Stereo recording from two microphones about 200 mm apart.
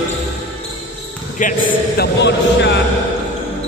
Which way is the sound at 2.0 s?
60° left (ahead or behind).